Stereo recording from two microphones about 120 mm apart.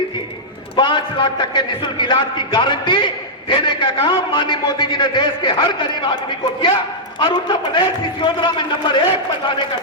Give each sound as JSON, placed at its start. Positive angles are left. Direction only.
{"t": 0.8, "sound": "a man's voice", "side_deg": 40}
{"t": 7.2, "sound": "a man's voice", "side_deg": 40}